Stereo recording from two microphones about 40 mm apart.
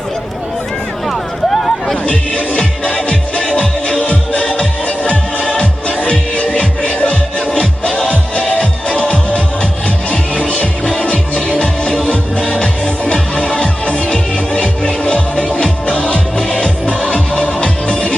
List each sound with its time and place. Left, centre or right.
1.0 s run: centre
2.0 s music: left
14.1 s music: left